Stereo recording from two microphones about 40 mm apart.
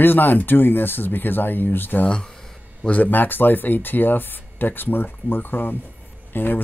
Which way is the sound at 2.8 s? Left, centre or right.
Left.